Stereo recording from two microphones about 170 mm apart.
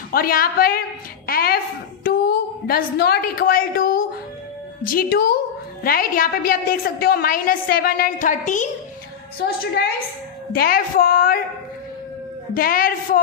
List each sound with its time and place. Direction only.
0.1 s a woman's voice: 60° left (ahead or behind)
9.4 s a woman's voice: 70° left (ahead or behind)
12.5 s a woman's voice: 55° left (ahead or behind)